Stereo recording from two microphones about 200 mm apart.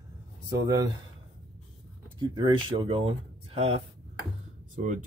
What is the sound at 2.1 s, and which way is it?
Speech, 20° right (ahead or behind).